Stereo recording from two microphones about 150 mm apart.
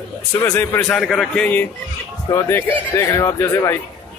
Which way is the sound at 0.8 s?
Centre (ahead or behind).